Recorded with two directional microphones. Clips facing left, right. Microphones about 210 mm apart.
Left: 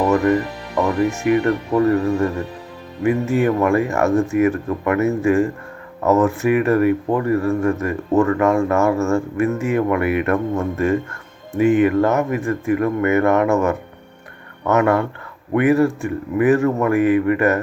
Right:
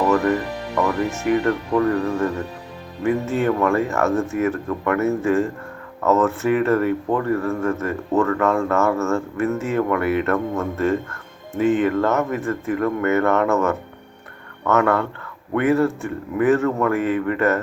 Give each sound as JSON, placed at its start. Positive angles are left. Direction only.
{"t": 0.8, "sound": "speech", "side_deg": 15}
{"t": 3.0, "sound": "speech", "side_deg": 10}